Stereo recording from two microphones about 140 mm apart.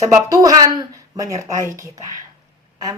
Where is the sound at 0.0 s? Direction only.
25° right (ahead or behind).